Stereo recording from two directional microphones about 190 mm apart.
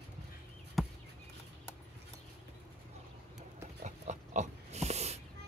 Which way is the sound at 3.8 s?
40° right (ahead or behind).